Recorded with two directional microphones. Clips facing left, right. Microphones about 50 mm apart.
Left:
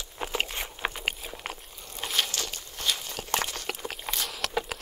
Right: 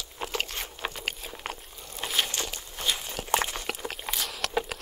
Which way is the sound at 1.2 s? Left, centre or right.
Centre.